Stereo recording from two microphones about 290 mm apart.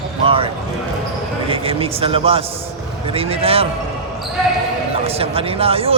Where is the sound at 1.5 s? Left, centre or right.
Centre.